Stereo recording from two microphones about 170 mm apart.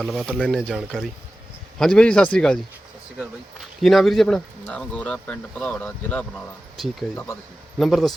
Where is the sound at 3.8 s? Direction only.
Centre (ahead or behind).